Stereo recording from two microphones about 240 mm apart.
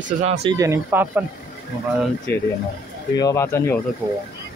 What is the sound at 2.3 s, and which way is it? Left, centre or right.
Speech, centre.